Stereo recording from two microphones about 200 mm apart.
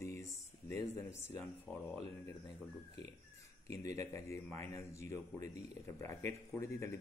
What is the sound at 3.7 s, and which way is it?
A man's voice, 15° left (ahead or behind).